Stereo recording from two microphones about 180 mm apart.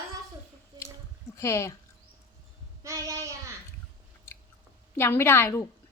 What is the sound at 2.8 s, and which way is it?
Child singing, 20° right (ahead or behind).